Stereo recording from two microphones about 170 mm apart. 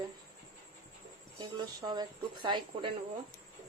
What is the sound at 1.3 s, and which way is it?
A woman's voice, 25° right (ahead or behind).